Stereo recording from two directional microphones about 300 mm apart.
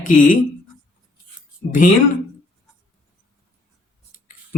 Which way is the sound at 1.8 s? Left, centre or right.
Left.